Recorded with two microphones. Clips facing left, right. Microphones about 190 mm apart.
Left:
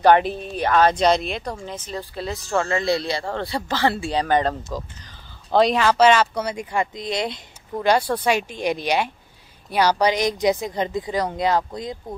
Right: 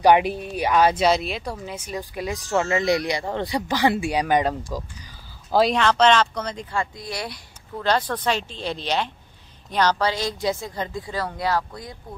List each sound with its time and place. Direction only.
0.0 s speech: 10° right (ahead or behind); by 7.9 s 20° left (ahead or behind)
7.9 s speech: 10° left (ahead or behind)